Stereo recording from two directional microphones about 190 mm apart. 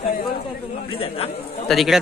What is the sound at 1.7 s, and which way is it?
Speech, centre (ahead or behind).